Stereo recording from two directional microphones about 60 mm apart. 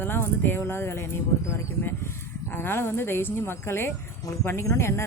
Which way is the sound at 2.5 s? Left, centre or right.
Left.